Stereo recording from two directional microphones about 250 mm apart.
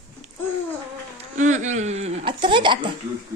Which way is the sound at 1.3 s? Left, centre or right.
Right.